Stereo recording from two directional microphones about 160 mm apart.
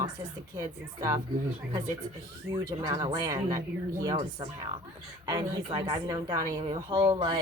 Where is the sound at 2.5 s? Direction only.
15° right (ahead or behind).